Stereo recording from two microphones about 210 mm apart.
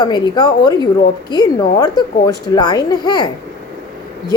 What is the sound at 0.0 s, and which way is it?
Speech, 20° left (ahead or behind).